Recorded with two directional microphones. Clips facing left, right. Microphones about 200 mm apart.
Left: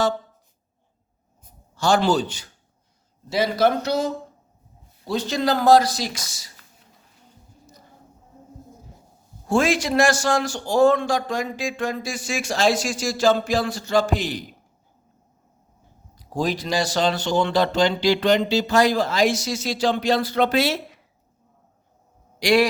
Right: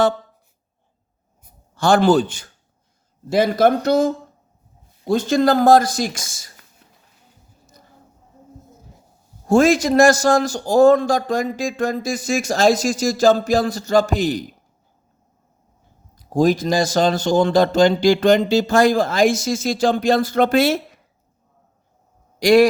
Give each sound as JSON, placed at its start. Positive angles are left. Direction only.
{"t": 1.7, "sound": "a man's voice", "side_deg": -55}
{"t": 9.5, "sound": "a man's voice", "side_deg": -45}
{"t": 16.1, "sound": "a man's voice", "side_deg": -45}
{"t": 22.4, "sound": "a man's voice", "side_deg": -45}